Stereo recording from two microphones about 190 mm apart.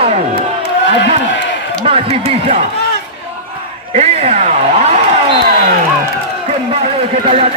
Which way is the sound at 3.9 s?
35° right (ahead or behind).